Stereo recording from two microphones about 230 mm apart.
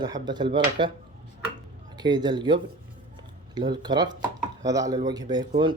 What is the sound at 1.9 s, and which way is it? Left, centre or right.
Speech, centre.